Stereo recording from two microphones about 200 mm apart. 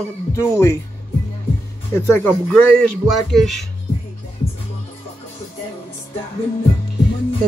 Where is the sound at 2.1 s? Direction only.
5° left (ahead or behind).